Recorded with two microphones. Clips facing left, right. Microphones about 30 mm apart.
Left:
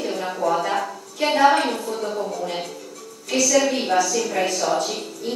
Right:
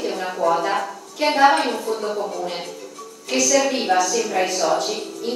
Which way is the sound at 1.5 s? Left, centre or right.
Centre.